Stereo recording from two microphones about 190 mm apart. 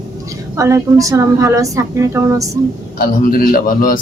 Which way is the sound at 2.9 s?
50° left (ahead or behind).